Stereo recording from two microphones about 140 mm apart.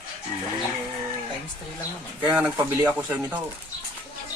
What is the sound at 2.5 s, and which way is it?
Speech, 20° right (ahead or behind).